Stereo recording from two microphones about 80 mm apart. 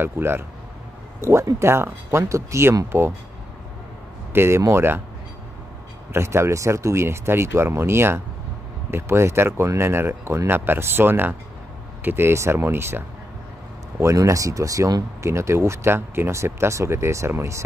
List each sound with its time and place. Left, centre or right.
0.0 s speech: right
2.9 s speech: right
4.3 s speech: right
6.1 s speech: right
13.9 s speech: right